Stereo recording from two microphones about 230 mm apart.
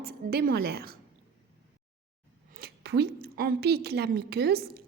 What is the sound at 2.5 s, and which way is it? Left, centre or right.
A woman's voice, right.